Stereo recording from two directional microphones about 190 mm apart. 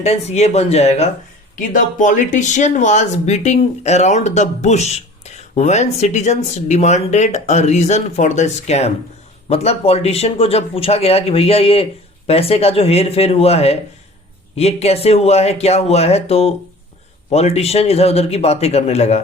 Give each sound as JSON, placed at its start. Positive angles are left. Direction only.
{"t": 0.0, "sound": "speech", "side_deg": 35}